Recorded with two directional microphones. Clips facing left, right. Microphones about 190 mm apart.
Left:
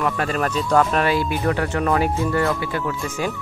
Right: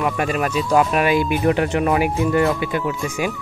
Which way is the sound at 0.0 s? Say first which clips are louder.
Right 1 dB; 10° right (ahead or behind).